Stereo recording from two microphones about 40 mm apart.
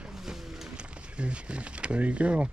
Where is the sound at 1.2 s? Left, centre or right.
Right.